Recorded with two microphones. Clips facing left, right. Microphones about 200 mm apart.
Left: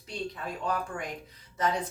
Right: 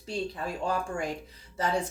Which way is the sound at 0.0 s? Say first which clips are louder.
Right 3 dB; 30° right (ahead or behind).